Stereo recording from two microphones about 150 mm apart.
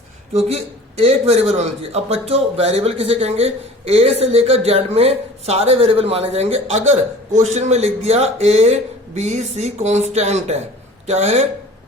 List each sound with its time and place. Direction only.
0.4 s speech: 45° right (ahead or behind)